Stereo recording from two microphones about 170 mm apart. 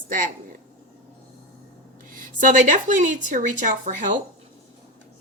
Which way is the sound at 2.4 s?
50° right (ahead or behind).